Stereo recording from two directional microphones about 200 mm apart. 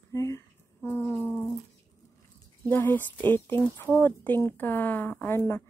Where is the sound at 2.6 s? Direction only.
10° left (ahead or behind).